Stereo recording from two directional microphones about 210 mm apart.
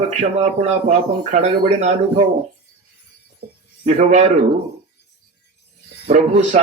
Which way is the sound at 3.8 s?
35° right (ahead or behind).